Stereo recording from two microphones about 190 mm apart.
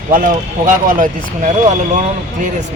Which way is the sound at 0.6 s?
45° right (ahead or behind).